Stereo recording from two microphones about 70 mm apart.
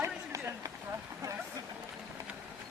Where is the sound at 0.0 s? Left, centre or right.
Right.